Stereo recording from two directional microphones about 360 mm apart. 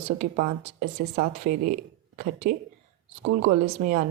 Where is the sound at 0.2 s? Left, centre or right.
Right.